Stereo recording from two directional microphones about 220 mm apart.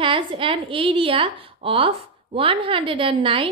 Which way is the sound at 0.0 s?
25° right (ahead or behind).